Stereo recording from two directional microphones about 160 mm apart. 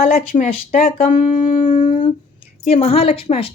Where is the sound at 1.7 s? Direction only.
50° left (ahead or behind).